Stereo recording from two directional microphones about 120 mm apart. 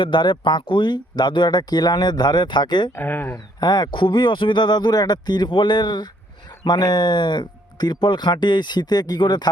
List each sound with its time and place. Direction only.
0.0 s speech: 40° left (ahead or behind)
2.9 s speech: 15° left (ahead or behind)
3.3 s speech: 35° left (ahead or behind)